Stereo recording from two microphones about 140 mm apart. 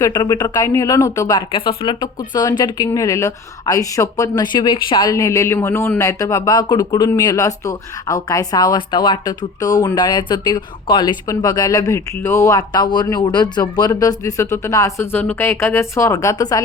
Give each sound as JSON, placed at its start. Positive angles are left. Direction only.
{"t": 0.0, "sound": "speech", "side_deg": 25}
{"t": 1.4, "sound": "speech", "side_deg": 35}